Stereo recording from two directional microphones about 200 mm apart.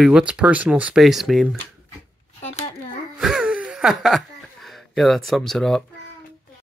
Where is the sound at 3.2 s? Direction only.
5° right (ahead or behind).